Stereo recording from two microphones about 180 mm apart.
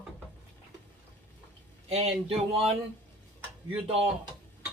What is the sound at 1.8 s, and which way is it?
Speech, 35° right (ahead or behind).